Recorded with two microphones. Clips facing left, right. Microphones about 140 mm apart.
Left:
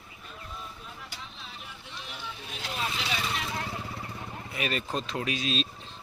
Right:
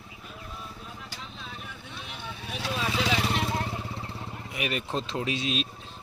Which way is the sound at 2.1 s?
70° right (ahead or behind).